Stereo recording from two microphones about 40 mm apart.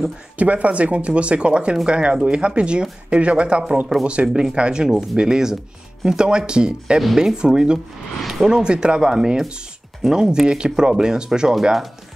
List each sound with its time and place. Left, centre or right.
0.4 s speech: right
4.3 s speech: centre